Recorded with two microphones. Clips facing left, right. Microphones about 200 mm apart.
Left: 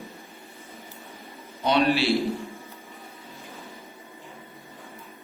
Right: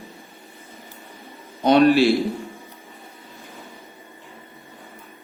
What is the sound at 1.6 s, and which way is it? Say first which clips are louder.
Speech: right 7 dB; 50° right (ahead or behind).